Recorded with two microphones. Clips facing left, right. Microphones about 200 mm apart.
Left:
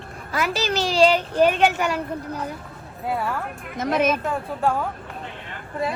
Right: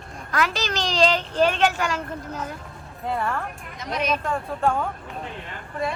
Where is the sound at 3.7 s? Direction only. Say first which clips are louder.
Left 7 dB; 50° left (ahead or behind).